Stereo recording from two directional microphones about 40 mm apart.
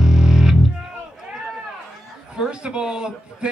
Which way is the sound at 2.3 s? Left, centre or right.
Right.